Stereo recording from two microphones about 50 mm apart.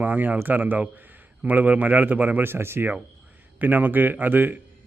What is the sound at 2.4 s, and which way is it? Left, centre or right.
Speech, right.